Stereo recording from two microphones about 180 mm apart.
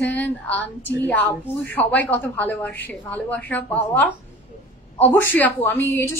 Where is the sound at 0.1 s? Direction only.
10° left (ahead or behind).